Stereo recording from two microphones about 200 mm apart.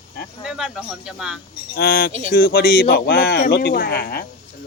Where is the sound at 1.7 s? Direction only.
45° left (ahead or behind).